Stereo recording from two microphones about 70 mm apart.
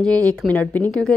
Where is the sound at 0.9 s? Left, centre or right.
Centre.